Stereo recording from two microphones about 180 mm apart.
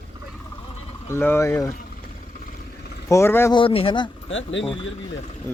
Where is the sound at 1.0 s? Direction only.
15° left (ahead or behind).